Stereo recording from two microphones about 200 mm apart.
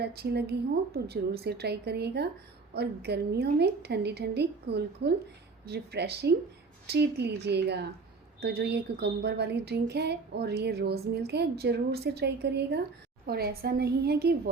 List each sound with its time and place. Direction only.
0.0 s a woman's voice: 55° right (ahead or behind)